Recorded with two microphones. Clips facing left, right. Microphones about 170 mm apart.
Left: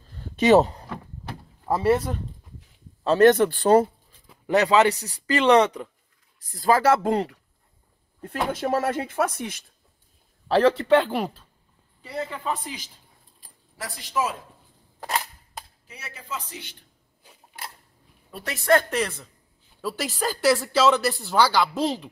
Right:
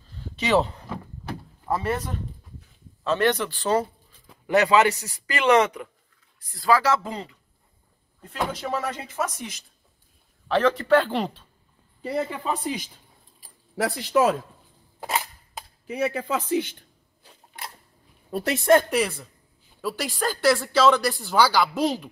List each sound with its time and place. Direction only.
0.4 s speech: 45° left (ahead or behind)
4.5 s speech: 35° left (ahead or behind)
6.5 s speech: 45° left (ahead or behind); by 7.3 s 60° left (ahead or behind)
8.5 s speech: 50° left (ahead or behind)
10.5 s speech: 30° left (ahead or behind); by 11.4 s 10° left (ahead or behind)
12.3 s a woman's voice: 15° right (ahead or behind)
13.7 s speech: 70° right (ahead or behind)
15.0 s cap gun: 5° right (ahead or behind)
15.9 s speech: 60° right (ahead or behind)
17.2 s a sound: 10° left (ahead or behind)
18.7 s a woman's voice: 10° right (ahead or behind)